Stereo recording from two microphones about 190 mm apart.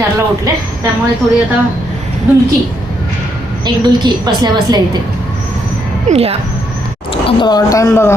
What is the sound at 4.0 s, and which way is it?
Speech, 20° right (ahead or behind).